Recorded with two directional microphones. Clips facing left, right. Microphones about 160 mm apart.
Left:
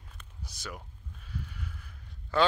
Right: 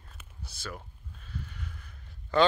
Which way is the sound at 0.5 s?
15° left (ahead or behind).